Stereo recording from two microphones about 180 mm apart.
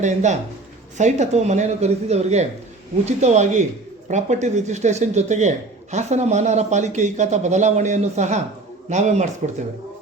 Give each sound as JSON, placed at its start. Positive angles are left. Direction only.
{"t": 0.0, "sound": "a man's voice", "side_deg": -40}